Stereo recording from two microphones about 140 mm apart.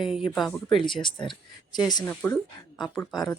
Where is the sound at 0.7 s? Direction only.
35° left (ahead or behind).